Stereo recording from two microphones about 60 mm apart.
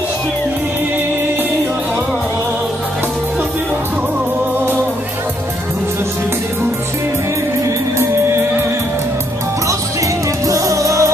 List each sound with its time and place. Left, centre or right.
10.4 s music: right